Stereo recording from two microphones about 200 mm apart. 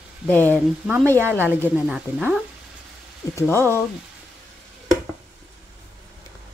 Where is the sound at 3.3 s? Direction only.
10° left (ahead or behind).